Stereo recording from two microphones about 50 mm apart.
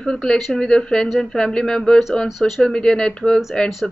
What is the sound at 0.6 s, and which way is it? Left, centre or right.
Speech, centre.